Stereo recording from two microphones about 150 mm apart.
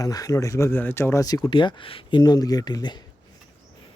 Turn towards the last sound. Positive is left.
turn(degrees=30)  # may be behind; listen again after turning